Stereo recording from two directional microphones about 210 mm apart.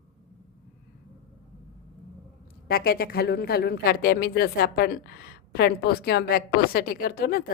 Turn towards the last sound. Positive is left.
turn(degrees=45)  # may be behind; listen again after turning